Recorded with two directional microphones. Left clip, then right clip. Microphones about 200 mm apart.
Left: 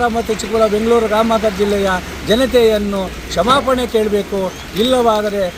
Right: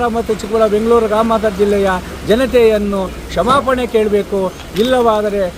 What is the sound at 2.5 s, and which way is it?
Speech, 35° right (ahead or behind).